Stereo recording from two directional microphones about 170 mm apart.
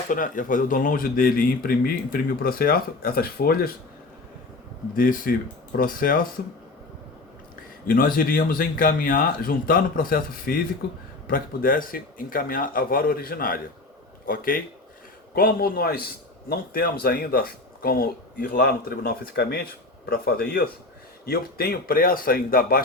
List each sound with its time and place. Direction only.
0.1 s speech: 50° left (ahead or behind)
4.9 s speech: 55° left (ahead or behind)
7.9 s speech: 55° left (ahead or behind)